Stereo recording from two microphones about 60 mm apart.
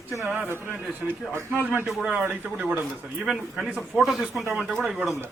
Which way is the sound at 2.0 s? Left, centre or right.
Centre.